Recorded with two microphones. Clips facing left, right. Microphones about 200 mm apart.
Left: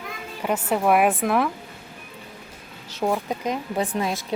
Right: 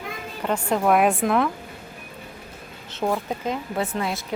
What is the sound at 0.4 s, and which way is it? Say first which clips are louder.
A woman's voice: even; 5° left (ahead or behind).